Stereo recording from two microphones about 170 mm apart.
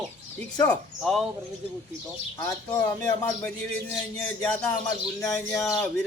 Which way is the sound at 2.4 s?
15° left (ahead or behind).